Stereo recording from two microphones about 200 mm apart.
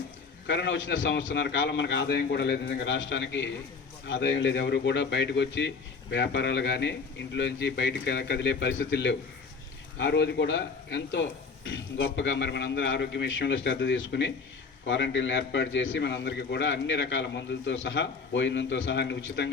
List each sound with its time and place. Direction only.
0.4 s speech: 65° left (ahead or behind)